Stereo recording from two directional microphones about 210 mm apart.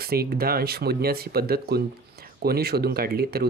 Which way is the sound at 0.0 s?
45° right (ahead or behind).